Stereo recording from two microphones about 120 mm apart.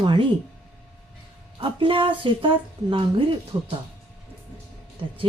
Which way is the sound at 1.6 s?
45° right (ahead or behind).